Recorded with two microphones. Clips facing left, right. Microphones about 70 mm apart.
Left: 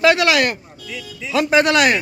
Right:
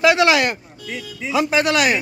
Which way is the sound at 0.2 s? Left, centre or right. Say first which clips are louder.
Right 1 dB; right.